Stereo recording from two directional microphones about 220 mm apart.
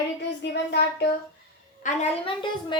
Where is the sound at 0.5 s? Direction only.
50° left (ahead or behind).